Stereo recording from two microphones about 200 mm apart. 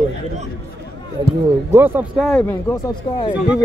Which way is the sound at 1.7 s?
10° right (ahead or behind).